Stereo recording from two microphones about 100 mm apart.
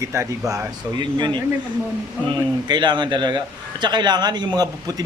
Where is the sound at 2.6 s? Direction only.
50° right (ahead or behind).